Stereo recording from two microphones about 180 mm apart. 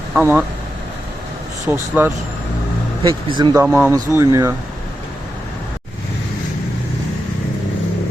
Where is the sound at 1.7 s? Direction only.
10° right (ahead or behind).